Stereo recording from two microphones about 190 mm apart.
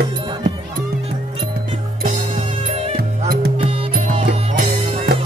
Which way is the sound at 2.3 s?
30° right (ahead or behind).